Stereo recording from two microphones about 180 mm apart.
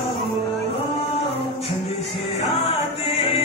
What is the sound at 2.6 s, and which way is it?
Music, 30° left (ahead or behind).